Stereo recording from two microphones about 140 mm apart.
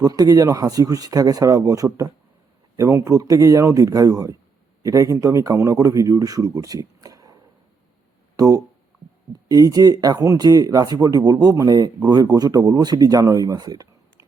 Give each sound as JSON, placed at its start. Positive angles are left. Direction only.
{"t": 0.0, "sound": "speech", "side_deg": -25}
{"t": 8.4, "sound": "speech", "side_deg": -25}